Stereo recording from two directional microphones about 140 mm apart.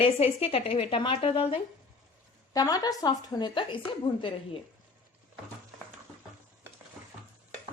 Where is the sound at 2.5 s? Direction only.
25° left (ahead or behind).